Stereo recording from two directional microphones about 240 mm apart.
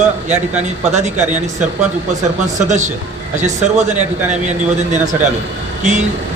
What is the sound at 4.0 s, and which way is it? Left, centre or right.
A man's voice, right.